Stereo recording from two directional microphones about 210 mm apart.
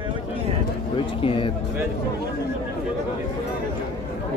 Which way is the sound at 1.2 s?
25° left (ahead or behind).